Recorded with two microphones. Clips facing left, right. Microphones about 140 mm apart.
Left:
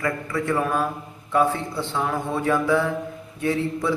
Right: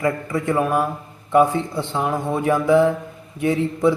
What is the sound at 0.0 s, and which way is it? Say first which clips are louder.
Speech: right 4 dB; 25° right (ahead or behind).